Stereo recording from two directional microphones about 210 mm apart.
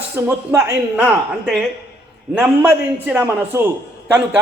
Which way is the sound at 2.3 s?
5° right (ahead or behind).